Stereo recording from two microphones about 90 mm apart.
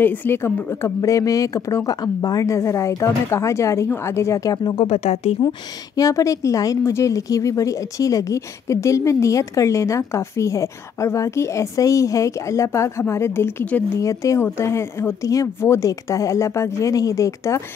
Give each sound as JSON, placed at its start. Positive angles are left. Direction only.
{"t": 0.0, "sound": "a woman's voice", "side_deg": 20}
{"t": 5.4, "sound": "speech", "side_deg": 50}
{"t": 5.9, "sound": "a woman's voice", "side_deg": 40}